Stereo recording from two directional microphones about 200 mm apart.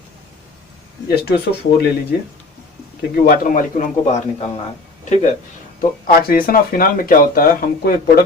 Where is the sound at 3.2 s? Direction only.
45° left (ahead or behind).